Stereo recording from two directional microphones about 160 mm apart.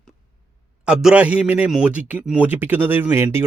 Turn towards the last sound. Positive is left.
turn(degrees=-15)  # may be behind; listen again after turning